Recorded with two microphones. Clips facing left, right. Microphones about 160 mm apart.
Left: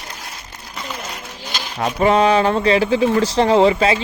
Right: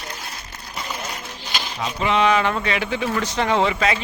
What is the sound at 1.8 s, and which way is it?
Speech, 55° left (ahead or behind).